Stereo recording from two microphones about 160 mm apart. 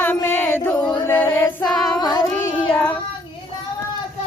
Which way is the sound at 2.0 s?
25° left (ahead or behind).